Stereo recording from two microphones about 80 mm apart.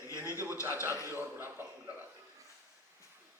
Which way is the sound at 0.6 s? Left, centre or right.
Right.